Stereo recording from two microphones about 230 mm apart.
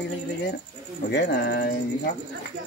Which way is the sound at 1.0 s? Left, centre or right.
Left.